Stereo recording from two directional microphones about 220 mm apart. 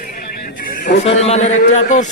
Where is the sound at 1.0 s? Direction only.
30° left (ahead or behind).